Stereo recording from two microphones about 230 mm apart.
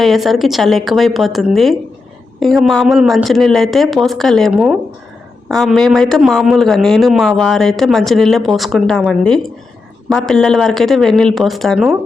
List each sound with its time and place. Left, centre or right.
0.0 s speech: centre